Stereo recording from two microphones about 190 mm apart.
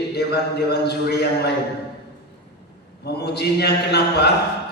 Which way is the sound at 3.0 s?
60° left (ahead or behind).